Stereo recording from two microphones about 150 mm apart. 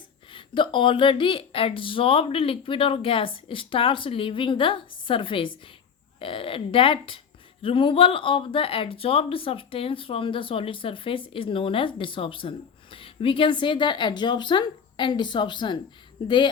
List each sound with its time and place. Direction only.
0.3 s speech: 35° left (ahead or behind)